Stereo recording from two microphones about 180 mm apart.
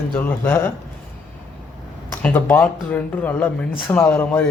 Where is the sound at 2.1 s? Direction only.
10° left (ahead or behind).